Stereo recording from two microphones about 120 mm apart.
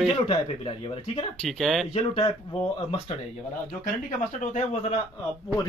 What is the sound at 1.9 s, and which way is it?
Speech, 50° left (ahead or behind).